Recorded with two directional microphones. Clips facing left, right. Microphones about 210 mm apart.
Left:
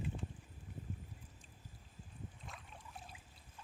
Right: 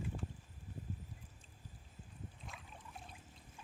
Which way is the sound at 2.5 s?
Centre (ahead or behind).